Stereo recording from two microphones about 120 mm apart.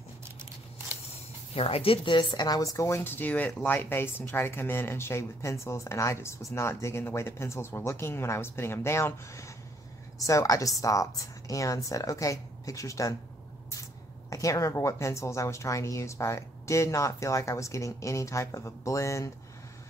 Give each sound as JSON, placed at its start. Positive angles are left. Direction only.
{"t": 1.5, "sound": "a woman's voice", "side_deg": 50}
{"t": 14.3, "sound": "a woman's voice", "side_deg": 25}